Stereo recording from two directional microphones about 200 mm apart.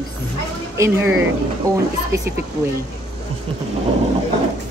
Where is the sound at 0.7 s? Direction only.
10° right (ahead or behind).